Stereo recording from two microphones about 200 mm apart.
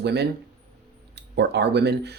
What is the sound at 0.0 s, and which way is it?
Speech, 55° right (ahead or behind).